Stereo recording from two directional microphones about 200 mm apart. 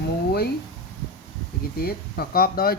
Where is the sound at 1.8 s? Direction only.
50° left (ahead or behind).